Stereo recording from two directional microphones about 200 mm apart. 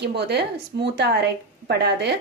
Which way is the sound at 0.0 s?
55° right (ahead or behind).